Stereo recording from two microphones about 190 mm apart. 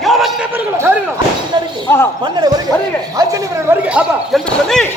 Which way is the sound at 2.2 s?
20° right (ahead or behind).